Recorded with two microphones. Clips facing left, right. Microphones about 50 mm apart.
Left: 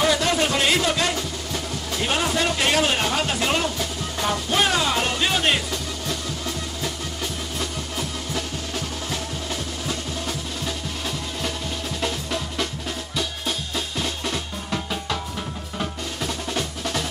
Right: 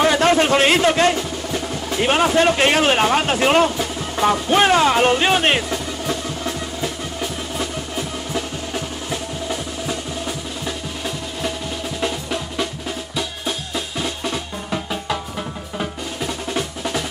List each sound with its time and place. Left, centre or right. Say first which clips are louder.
0.0 s a sound: right 5 dB; right
1.9 s speech: right 7 dB; right
3.7 s music: right 4 dB; right
12.0 s music: right 3 dB; centre
13.7 s drum: right 2 dB; centre
15.8 s music: right 2 dB; centre